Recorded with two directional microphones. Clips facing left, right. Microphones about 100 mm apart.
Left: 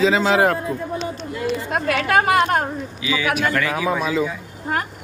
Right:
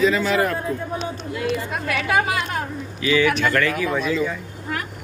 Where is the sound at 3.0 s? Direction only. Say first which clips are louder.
Right 6 dB; 10° left (ahead or behind).